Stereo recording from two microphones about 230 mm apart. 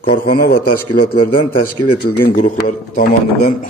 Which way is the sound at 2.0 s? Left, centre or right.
Left.